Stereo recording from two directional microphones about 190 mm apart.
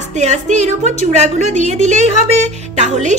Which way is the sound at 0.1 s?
40° right (ahead or behind).